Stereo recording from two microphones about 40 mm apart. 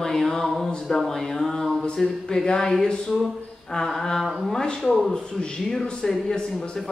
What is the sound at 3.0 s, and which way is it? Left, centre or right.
Speech, centre.